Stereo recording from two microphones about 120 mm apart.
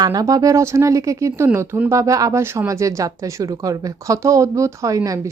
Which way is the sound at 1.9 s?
25° right (ahead or behind).